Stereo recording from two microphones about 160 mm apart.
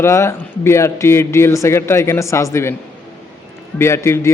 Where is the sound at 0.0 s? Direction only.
20° left (ahead or behind).